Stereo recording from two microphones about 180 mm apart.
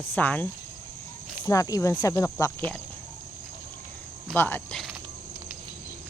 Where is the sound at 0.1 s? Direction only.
10° left (ahead or behind).